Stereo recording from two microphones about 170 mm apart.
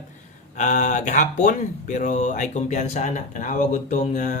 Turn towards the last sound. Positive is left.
turn(degrees=45)  # may be behind; listen again after turning